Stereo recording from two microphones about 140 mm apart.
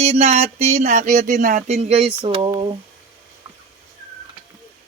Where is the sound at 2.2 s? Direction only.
35° right (ahead or behind).